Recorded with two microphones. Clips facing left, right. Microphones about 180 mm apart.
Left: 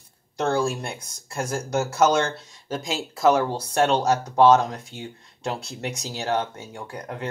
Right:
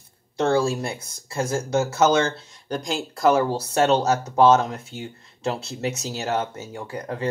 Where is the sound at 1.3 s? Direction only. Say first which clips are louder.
Right 3 dB; 25° right (ahead or behind).